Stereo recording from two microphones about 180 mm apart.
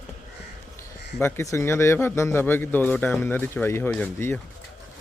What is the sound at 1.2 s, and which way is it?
Speech, 15° left (ahead or behind).